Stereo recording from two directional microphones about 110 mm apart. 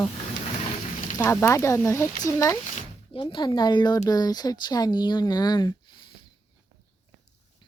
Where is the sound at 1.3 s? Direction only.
25° left (ahead or behind).